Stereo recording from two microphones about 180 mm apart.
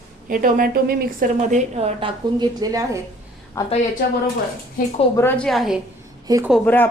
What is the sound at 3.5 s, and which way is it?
Speech, 15° left (ahead or behind).